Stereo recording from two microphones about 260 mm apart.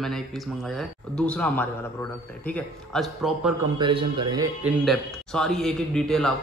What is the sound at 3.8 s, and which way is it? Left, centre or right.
Speech, centre.